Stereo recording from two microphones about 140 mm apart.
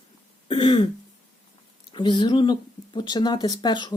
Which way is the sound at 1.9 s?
30° left (ahead or behind).